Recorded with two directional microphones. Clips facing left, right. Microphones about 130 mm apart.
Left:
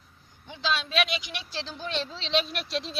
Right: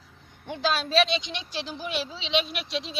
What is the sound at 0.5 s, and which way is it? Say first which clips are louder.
Speech: right 4 dB; 45° right (ahead or behind).